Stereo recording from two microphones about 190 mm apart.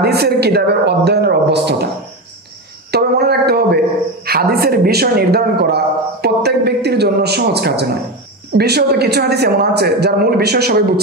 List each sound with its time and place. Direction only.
0.0 s a man's voice: 60° right (ahead or behind)
2.9 s a sound: 55° right (ahead or behind)
4.3 s a man's voice: 55° right (ahead or behind)